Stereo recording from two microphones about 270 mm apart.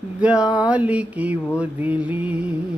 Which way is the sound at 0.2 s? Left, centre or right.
Centre.